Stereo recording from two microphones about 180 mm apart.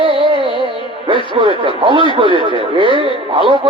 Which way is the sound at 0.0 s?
30° right (ahead or behind).